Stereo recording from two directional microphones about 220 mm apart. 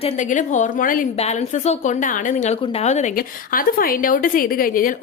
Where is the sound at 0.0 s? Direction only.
35° left (ahead or behind).